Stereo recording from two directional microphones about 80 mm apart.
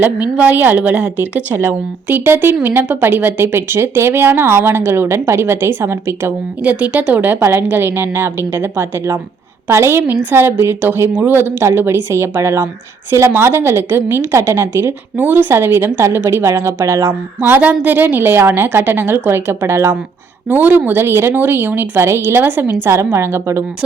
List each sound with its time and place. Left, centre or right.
0.0 s a woman's voice: right
6.6 s a woman's voice: centre; by 17.2 s right
17.4 s a woman's voice: right
20.5 s a woman's voice: right